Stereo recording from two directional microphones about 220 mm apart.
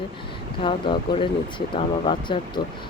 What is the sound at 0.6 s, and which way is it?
Speech, 25° left (ahead or behind).